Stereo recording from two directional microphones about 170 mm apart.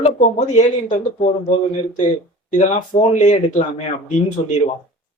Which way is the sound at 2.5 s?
45° left (ahead or behind).